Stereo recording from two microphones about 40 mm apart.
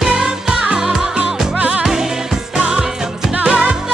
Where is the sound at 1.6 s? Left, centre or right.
Right.